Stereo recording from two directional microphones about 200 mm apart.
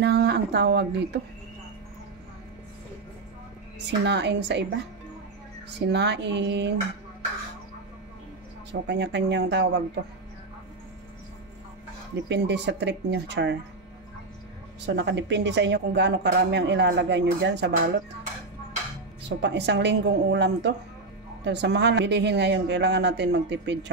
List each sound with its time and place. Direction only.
0.0 s speech: 55° right (ahead or behind)
4.0 s speech: 60° right (ahead or behind)
5.8 s speech: 60° right (ahead or behind)
8.8 s speech: 60° right (ahead or behind)
12.3 s speech: 60° right (ahead or behind)
14.9 s speech: 60° right (ahead or behind)
19.2 s speech: 60° right (ahead or behind)